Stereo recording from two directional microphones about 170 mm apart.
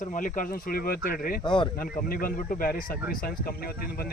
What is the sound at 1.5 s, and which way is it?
Speech, 30° left (ahead or behind).